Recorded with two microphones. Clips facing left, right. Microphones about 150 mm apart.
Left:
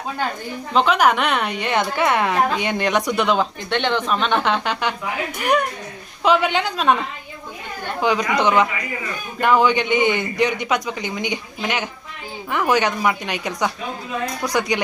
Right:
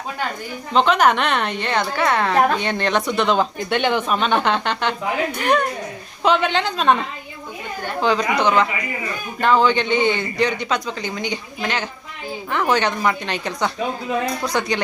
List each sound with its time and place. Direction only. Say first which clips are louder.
0.7 s a woman's voice: right 1 dB; 5° left (ahead or behind)
3.7 s a woman's voice: right 1 dB; 10° right (ahead or behind); by 6.9 s 5° left (ahead or behind)
8.0 s a woman's voice: even; 15° left (ahead or behind)